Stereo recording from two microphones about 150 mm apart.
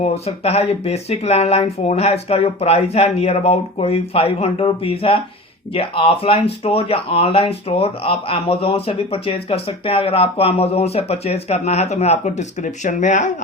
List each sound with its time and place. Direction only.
0.0 s speech: 45° left (ahead or behind)